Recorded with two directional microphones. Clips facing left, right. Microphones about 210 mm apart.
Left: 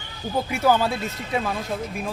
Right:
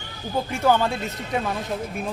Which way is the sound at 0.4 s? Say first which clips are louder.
Even; 10° left (ahead or behind).